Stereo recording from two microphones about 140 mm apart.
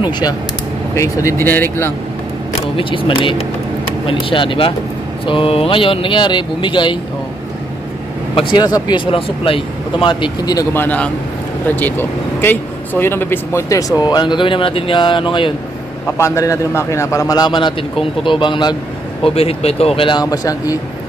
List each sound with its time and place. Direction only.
0.0 s speech: 30° left (ahead or behind)
2.5 s speech: 40° left (ahead or behind)
8.4 s speech: 35° left (ahead or behind)
10.7 s speech: 15° left (ahead or behind); by 15.5 s 35° left (ahead or behind)
16.2 s speech: 20° left (ahead or behind)
19.2 s speech: 45° left (ahead or behind); by 20.8 s 25° left (ahead or behind)